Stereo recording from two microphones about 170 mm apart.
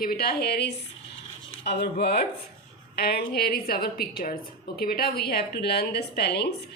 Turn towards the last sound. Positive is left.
turn(degrees=70)  # may be behind; listen again after turning